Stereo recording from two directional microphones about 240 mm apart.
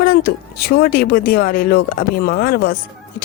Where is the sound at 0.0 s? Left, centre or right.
Left.